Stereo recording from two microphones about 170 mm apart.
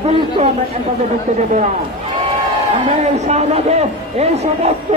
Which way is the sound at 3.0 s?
40° right (ahead or behind).